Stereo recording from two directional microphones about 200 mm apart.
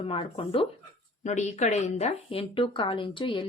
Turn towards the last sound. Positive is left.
turn(degrees=25)  # may be behind; listen again after turning